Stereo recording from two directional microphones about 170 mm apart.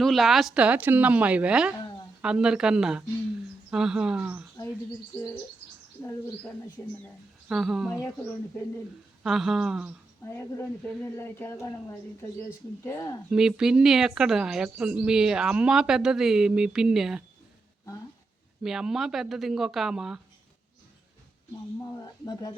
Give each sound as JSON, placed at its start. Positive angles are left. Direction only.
{"t": 0.0, "sound": "a woman's voice", "side_deg": 0}
{"t": 6.8, "sound": "a woman's voice", "side_deg": 10}
{"t": 7.4, "sound": "speech", "side_deg": -5}
{"t": 9.2, "sound": "speech", "side_deg": 0}
{"t": 10.2, "sound": "a woman's voice", "side_deg": 15}
{"t": 13.3, "sound": "speech", "side_deg": -5}
{"t": 18.6, "sound": "speech", "side_deg": 0}
{"t": 21.8, "sound": "speech", "side_deg": 20}